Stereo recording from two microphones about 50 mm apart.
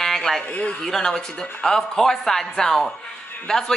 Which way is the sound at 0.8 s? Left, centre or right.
Centre.